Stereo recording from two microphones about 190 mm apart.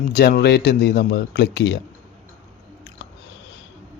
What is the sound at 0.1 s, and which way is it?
Speech, 55° left (ahead or behind).